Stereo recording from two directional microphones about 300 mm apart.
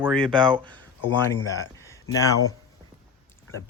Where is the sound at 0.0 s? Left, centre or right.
Centre.